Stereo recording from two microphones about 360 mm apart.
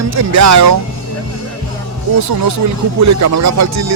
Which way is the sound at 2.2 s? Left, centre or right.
Right.